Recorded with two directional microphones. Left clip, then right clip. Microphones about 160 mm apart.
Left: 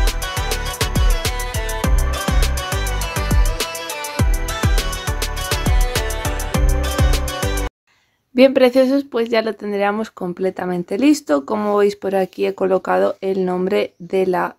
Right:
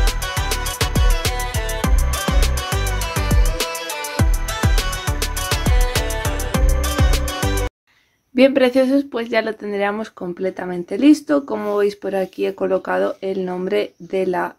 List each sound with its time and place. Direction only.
0.0 s music: centre (ahead or behind)
8.4 s speech: 25° left (ahead or behind)